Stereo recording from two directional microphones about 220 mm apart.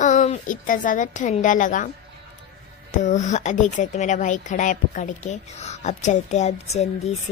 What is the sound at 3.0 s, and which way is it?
Speech, 35° left (ahead or behind).